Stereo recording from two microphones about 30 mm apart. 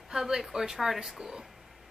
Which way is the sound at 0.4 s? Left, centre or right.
Centre.